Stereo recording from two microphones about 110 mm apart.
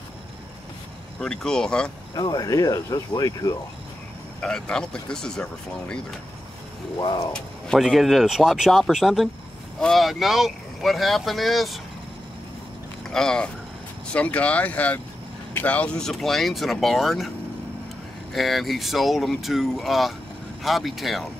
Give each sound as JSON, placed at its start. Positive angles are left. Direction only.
{"t": 1.2, "sound": "speech", "side_deg": 5}
{"t": 2.1, "sound": "speech", "side_deg": 40}
{"t": 4.4, "sound": "speech", "side_deg": 10}
{"t": 7.0, "sound": "speech", "side_deg": 45}
{"t": 7.3, "sound": "speech", "side_deg": 5}
{"t": 13.1, "sound": "speech", "side_deg": 5}
{"t": 18.3, "sound": "speech", "side_deg": 0}